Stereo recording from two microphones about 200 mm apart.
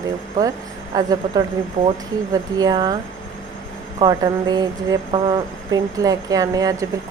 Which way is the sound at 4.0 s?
20° right (ahead or behind).